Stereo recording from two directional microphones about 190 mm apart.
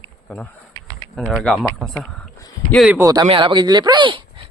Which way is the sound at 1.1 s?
5° left (ahead or behind).